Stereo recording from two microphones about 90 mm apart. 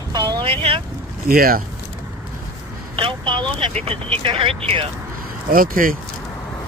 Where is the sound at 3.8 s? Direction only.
85° right.